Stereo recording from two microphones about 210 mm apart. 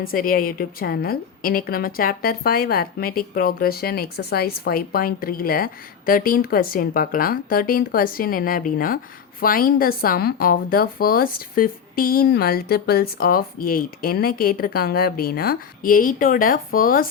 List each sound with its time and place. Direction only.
0.0 s a woman's voice: 45° left (ahead or behind)